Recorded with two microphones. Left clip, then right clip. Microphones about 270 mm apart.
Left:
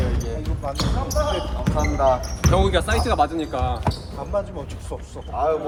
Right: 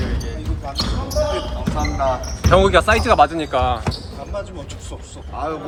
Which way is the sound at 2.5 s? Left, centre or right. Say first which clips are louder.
Right 8 dB; right.